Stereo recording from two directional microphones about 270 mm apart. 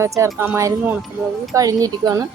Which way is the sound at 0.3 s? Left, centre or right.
Centre.